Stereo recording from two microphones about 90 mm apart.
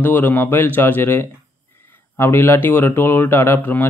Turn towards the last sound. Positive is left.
turn(degrees=20)  # may be behind; listen again after turning